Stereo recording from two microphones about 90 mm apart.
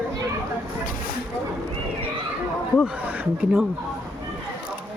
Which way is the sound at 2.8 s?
20° right (ahead or behind).